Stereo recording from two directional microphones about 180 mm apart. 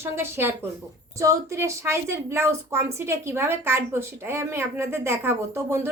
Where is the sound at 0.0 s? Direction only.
15° right (ahead or behind).